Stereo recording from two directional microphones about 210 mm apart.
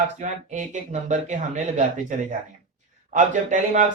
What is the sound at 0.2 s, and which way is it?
Speech, 35° right (ahead or behind).